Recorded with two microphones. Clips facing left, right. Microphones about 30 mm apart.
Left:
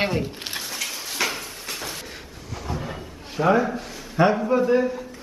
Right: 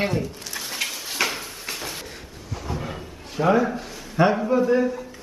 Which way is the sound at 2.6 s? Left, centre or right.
Centre.